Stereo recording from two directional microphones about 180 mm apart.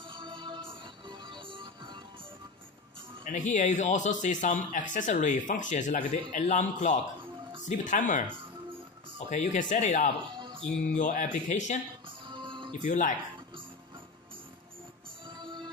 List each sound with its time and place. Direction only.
0.0 s music: 30° right (ahead or behind)
3.3 s speech: 45° left (ahead or behind)
9.3 s speech: 40° left (ahead or behind)
12.3 s music: 25° right (ahead or behind)
12.7 s speech: 45° left (ahead or behind)
15.2 s music: 25° right (ahead or behind)